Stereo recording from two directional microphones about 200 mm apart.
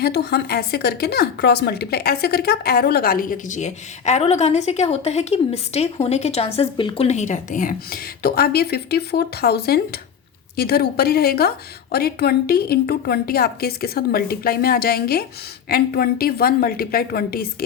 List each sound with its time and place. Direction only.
0.0 s speech: 55° left (ahead or behind)